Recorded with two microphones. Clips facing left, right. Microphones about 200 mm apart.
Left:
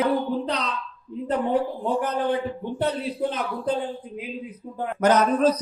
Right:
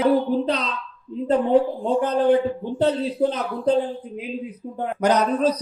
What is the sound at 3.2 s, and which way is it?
Speech, 40° right (ahead or behind).